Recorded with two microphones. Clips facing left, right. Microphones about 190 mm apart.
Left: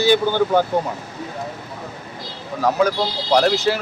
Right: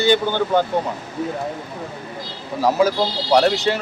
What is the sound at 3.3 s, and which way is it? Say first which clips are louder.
Speech: even; centre (ahead or behind).